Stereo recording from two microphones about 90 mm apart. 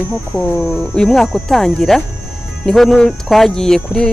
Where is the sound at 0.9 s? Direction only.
5° left (ahead or behind).